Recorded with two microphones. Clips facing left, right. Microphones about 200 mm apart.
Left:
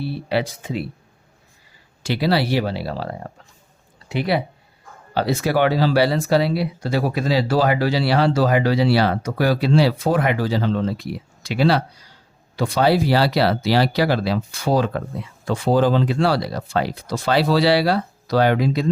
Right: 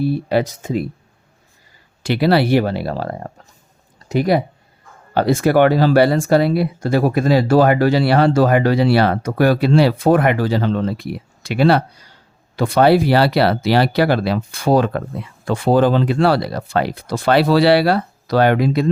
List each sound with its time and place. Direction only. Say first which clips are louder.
0.0 s speech: right 5 dB; 45° right (ahead or behind)
2.0 s speech: right 5 dB; 60° right (ahead or behind)